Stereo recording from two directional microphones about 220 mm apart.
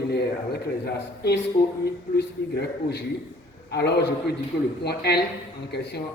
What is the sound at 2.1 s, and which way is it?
A man's voice, 50° left (ahead or behind).